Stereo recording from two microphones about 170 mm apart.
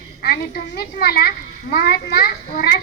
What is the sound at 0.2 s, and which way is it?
A child's voice, 65° left (ahead or behind).